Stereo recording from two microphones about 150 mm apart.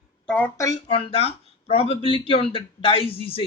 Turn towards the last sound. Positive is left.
turn(degrees=35)  # may be behind; listen again after turning